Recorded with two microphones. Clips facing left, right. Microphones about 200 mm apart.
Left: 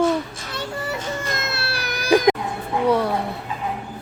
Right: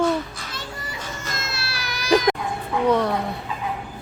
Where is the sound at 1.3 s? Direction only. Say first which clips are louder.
Left 4 dB; 60° left (ahead or behind).